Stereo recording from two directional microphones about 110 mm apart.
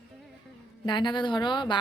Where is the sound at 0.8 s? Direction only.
45° left (ahead or behind).